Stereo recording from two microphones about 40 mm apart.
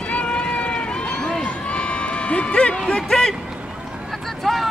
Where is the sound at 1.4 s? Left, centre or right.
Left.